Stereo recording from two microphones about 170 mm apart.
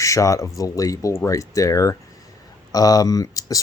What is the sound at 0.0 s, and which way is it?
Speech, 20° left (ahead or behind).